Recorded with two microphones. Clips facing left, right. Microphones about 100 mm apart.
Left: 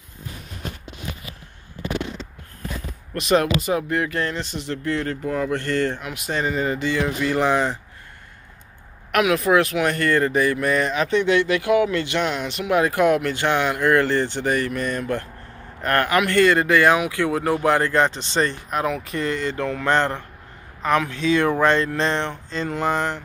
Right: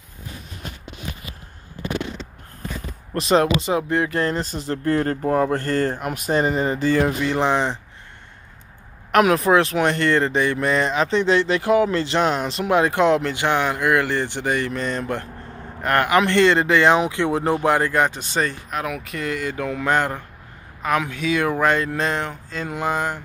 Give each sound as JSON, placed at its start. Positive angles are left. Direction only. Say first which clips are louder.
{"t": 3.2, "sound": "speech", "louder": "right 1 dB", "side_deg": -30}
{"t": 7.2, "sound": "speech", "louder": "even", "side_deg": -20}
{"t": 9.1, "sound": "speech", "louder": "right 2 dB", "side_deg": -35}